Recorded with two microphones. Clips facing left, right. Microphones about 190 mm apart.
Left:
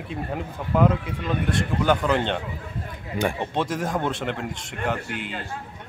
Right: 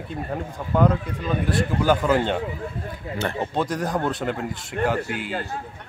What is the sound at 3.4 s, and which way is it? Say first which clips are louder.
Speech: right 1 dB; centre (ahead or behind).